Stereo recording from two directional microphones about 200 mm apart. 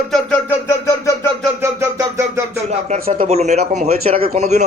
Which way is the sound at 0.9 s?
15° left (ahead or behind).